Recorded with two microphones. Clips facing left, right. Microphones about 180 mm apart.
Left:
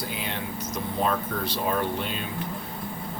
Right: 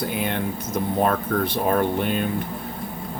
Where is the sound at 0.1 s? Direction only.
55° right (ahead or behind).